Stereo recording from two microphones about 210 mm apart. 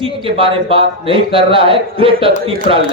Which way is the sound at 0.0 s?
25° right (ahead or behind).